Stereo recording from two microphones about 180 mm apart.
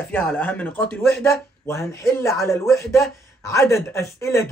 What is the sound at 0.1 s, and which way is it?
Speech, 10° left (ahead or behind).